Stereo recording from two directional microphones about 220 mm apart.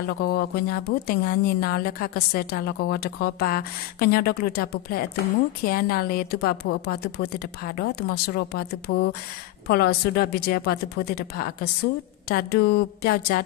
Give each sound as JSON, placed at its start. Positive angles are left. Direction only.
{"t": 0.2, "sound": "speech", "side_deg": 45}